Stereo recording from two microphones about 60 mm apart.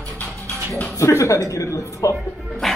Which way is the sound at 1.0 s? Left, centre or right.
Left.